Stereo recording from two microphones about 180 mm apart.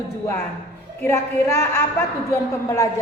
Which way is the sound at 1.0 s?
15° left (ahead or behind).